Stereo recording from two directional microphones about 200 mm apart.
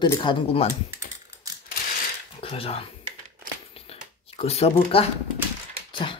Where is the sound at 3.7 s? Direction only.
30° left (ahead or behind).